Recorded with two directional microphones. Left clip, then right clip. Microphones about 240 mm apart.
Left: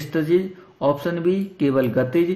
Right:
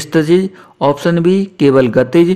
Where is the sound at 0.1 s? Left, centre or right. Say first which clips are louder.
Right 8 dB; right.